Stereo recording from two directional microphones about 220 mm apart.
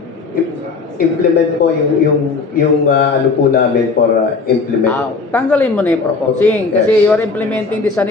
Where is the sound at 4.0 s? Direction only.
45° left (ahead or behind).